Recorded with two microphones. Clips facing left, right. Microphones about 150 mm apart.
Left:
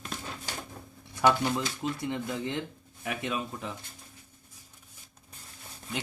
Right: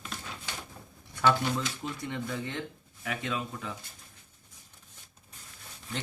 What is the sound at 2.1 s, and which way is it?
Speech, 20° left (ahead or behind).